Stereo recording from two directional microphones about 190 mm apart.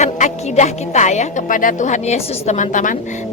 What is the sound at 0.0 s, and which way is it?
A woman's voice, 35° left (ahead or behind).